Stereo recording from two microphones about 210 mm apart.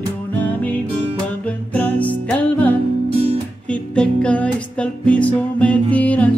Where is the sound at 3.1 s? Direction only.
30° right (ahead or behind).